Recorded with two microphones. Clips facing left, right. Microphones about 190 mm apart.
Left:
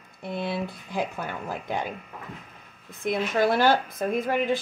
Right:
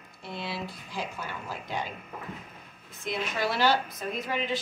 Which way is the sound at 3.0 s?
55° left (ahead or behind).